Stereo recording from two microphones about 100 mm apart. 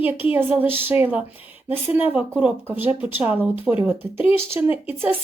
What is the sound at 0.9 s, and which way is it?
Speech, 20° right (ahead or behind).